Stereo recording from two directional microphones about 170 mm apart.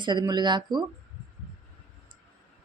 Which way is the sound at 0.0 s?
25° right (ahead or behind).